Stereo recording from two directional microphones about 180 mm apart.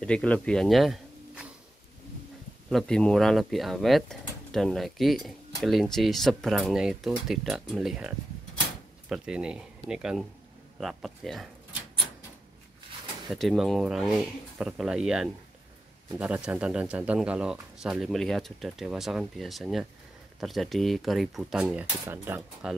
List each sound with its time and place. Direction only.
0.0 s speech: 5° left (ahead or behind)
2.7 s speech: 5° left (ahead or behind)
9.1 s speech: 5° right (ahead or behind)
13.3 s speech: centre (ahead or behind)